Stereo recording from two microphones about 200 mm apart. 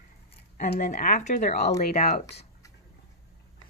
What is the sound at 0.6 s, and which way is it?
Speech, 45° left (ahead or behind).